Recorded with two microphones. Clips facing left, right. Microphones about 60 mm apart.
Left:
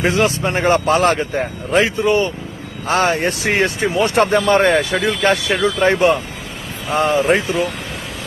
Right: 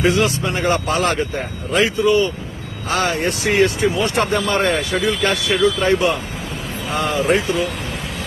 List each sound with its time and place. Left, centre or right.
0.0 s speech: left